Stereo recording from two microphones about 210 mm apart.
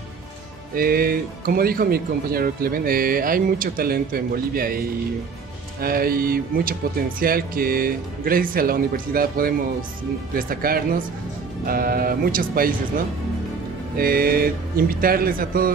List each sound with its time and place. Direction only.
0.7 s speech: 45° right (ahead or behind)